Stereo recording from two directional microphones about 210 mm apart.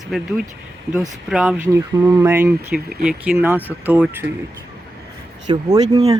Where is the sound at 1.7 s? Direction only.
15° right (ahead or behind).